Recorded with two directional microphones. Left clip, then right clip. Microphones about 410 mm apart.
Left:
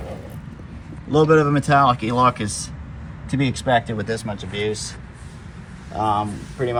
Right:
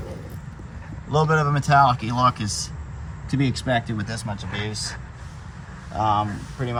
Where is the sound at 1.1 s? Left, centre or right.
Centre.